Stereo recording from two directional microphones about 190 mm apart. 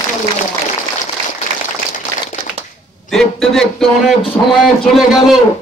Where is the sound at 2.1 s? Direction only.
20° left (ahead or behind).